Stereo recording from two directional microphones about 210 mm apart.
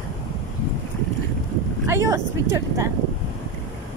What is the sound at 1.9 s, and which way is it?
Speech, 15° right (ahead or behind).